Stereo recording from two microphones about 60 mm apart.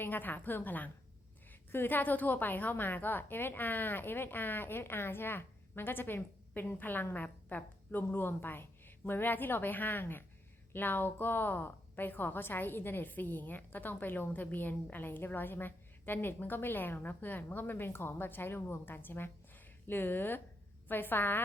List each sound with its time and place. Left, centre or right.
0.0 s a woman's voice: left
8.0 s a woman's voice: left